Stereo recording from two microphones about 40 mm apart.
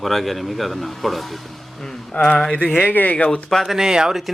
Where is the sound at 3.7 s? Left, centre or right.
Centre.